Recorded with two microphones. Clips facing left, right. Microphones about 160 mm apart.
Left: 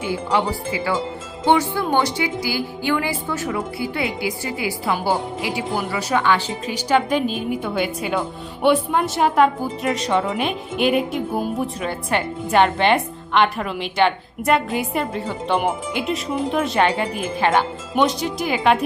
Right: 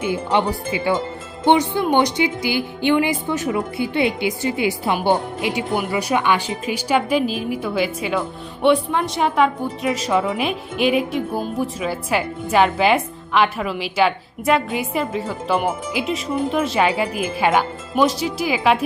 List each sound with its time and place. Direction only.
0.0 s speech: 20° right (ahead or behind)
5.6 s a woman's voice: centre (ahead or behind)
5.9 s a woman's voice: 15° right (ahead or behind)